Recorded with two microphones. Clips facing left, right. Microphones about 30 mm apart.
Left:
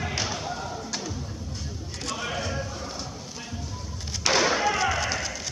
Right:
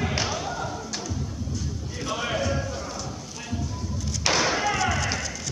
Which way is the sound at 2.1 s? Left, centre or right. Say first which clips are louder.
Right 3 dB; centre.